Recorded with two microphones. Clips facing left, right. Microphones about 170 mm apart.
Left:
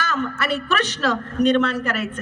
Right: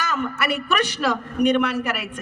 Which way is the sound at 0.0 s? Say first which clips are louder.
Even; 15° right (ahead or behind).